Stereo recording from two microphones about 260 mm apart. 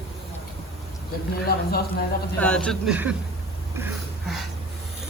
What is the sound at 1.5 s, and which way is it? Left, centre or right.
Speech, left.